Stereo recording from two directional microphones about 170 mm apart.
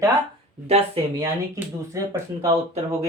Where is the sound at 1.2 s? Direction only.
20° right (ahead or behind).